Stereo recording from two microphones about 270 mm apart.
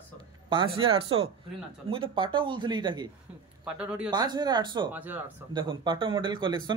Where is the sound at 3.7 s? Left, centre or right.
Centre.